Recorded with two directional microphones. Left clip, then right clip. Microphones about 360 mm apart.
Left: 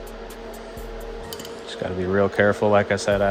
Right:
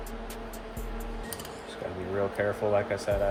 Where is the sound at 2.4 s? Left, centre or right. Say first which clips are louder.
Left 9 dB; left.